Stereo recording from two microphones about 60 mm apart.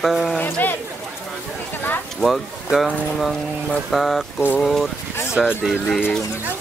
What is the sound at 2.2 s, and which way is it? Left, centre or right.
Speech, centre.